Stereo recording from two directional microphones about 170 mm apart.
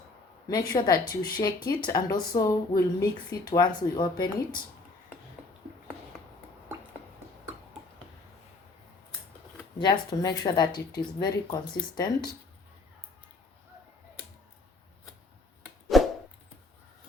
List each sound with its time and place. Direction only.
0.4 s speech: 25° left (ahead or behind)
9.7 s speech: 25° left (ahead or behind)
15.9 s a sound: centre (ahead or behind)